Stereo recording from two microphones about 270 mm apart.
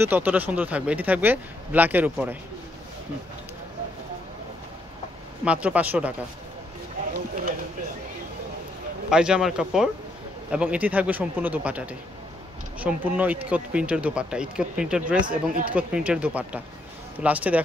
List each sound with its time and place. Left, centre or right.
0.0 s speech: centre
5.4 s speech: centre
9.1 s speech: centre
15.2 s speech: right
15.7 s speech: centre